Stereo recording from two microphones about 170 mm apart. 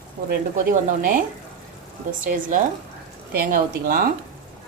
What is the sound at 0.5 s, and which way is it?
Speech, 50° right (ahead or behind).